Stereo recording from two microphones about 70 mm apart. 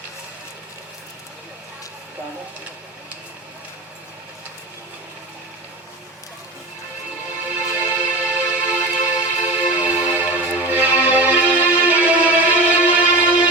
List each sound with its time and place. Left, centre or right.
7.7 s music: right